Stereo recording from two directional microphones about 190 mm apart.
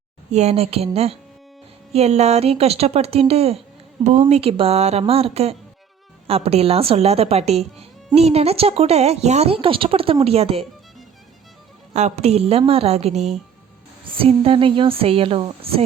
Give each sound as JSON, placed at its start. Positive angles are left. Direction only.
{"t": 0.3, "sound": "speech", "side_deg": -35}
{"t": 11.9, "sound": "a woman's voice", "side_deg": -35}